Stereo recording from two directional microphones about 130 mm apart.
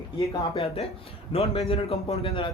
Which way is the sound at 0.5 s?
50° left (ahead or behind).